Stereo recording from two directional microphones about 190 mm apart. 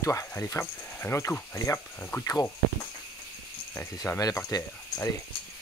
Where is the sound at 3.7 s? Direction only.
15° left (ahead or behind).